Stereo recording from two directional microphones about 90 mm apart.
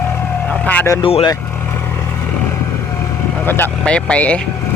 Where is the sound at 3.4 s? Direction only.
25° left (ahead or behind).